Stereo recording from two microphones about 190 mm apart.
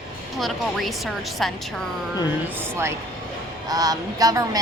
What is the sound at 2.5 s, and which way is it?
A woman's voice, 15° right (ahead or behind).